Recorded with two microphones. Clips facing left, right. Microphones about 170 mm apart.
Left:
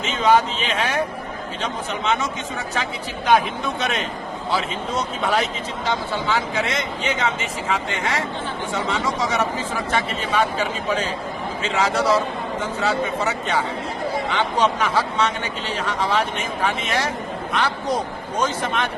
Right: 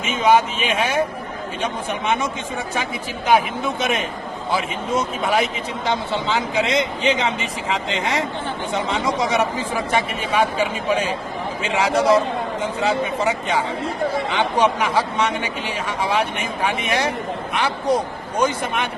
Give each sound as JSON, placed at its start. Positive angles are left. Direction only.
{"t": 0.1, "sound": "a man's voice", "side_deg": -10}
{"t": 3.2, "sound": "a man's voice", "side_deg": -10}